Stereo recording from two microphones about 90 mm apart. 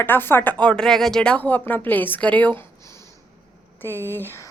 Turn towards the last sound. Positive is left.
turn(degrees=25)  # may be behind; listen again after turning